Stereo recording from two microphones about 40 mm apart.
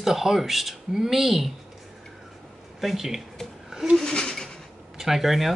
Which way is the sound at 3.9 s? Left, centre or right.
Centre.